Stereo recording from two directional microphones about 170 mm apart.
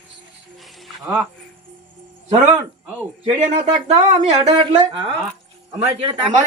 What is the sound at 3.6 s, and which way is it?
Speech, 35° right (ahead or behind).